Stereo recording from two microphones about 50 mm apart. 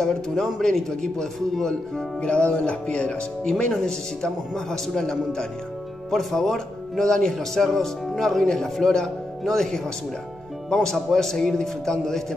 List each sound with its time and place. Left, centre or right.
0.0 s speech: centre
2.3 s music: left
3.4 s speech: centre